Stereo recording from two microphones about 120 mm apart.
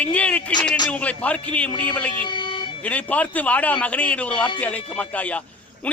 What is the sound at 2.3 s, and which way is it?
Vehicle, 45° left (ahead or behind).